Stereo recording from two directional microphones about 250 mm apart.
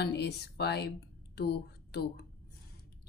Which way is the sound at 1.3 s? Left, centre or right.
Left.